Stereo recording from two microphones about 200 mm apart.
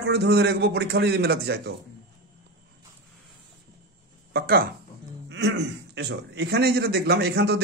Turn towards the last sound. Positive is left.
turn(degrees=-55)  # may be behind; listen again after turning